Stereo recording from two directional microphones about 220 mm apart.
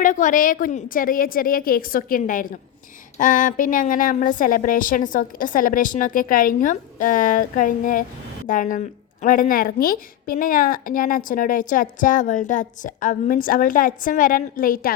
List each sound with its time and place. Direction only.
0.0 s a woman's voice: 35° left (ahead or behind)